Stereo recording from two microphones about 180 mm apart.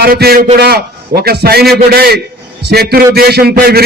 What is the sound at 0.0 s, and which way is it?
A man's voice, 55° right (ahead or behind).